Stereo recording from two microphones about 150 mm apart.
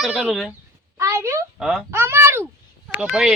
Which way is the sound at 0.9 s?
20° right (ahead or behind).